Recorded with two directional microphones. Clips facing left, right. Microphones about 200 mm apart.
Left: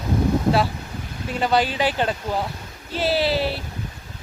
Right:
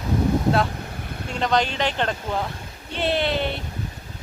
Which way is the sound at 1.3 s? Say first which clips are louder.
Left 2 dB; 5° left (ahead or behind).